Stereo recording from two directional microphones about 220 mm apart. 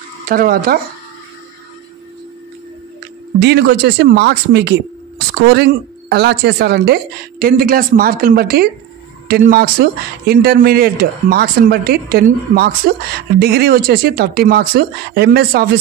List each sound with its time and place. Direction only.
0.3 s speech: 40° right (ahead or behind)
3.3 s speech: 50° right (ahead or behind)